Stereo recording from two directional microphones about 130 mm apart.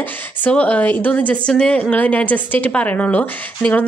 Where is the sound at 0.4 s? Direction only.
10° left (ahead or behind).